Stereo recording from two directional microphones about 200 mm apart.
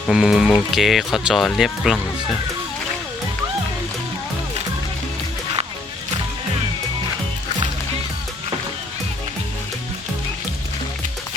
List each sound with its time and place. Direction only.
0.1 s speech: centre (ahead or behind)